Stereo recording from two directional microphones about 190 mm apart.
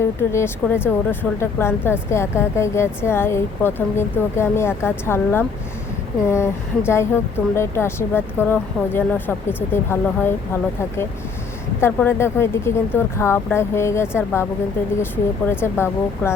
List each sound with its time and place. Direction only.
0.2 s speech: 15° left (ahead or behind)
15.1 s speech: 10° left (ahead or behind)